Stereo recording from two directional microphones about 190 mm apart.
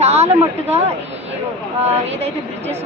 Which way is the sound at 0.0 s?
35° right (ahead or behind).